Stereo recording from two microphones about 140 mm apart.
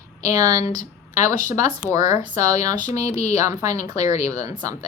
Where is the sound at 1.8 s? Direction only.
25° right (ahead or behind).